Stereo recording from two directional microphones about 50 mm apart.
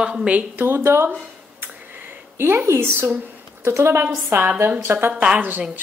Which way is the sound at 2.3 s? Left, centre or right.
Right.